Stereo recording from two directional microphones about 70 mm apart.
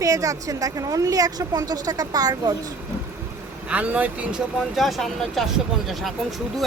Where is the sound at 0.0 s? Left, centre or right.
Right.